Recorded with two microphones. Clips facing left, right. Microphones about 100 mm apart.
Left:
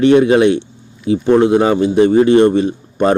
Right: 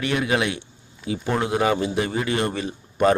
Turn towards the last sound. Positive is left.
turn(degrees=30)  # may be behind; listen again after turning